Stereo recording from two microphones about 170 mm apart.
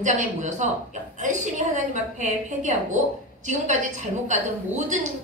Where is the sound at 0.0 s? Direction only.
45° right (ahead or behind).